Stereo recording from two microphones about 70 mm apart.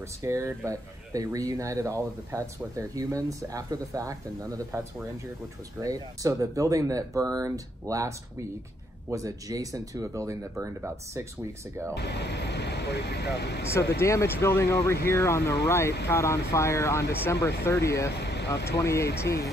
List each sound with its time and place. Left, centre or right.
0.2 s speech: right
0.7 s speech: right
5.8 s speech: right
9.1 s speech: right
13.7 s speech: left